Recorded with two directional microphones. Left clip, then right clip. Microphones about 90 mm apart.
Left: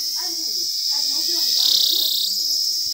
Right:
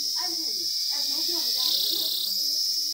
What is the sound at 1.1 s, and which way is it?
Cricket, 20° right (ahead or behind).